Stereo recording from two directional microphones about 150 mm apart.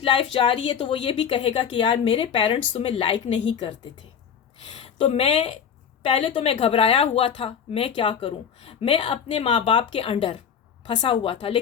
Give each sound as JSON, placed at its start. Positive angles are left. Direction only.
{"t": 0.0, "sound": "speech", "side_deg": 35}
{"t": 4.8, "sound": "speech", "side_deg": 35}